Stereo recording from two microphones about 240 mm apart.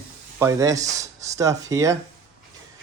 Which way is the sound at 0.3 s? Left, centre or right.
Centre.